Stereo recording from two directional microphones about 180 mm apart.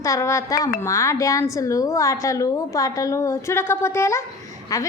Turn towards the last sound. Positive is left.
turn(degrees=20)  # may be behind; listen again after turning